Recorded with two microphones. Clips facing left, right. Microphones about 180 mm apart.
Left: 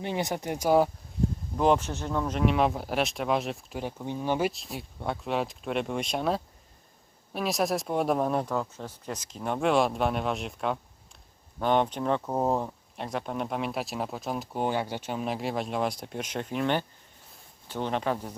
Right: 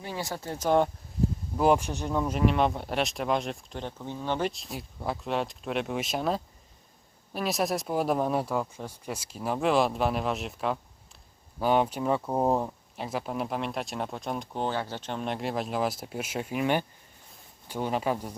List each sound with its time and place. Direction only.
0.0 s speech: 20° left (ahead or behind)
1.5 s speech: 10° right (ahead or behind)
2.4 s speech: centre (ahead or behind)